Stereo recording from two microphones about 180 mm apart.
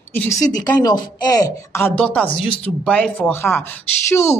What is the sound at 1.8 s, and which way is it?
Speech, 5° left (ahead or behind).